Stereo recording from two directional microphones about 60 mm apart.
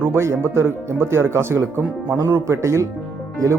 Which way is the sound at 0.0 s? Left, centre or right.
Right.